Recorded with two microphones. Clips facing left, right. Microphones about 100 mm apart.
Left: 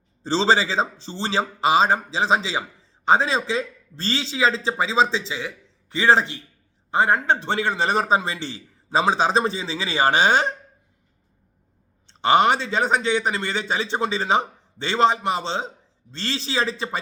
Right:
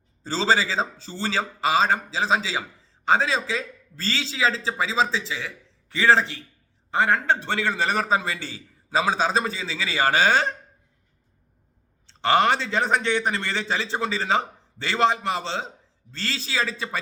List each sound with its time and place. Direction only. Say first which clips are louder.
0.3 s speech: left 3 dB; 25° left (ahead or behind)
12.2 s a man's voice: left 2 dB; 20° left (ahead or behind)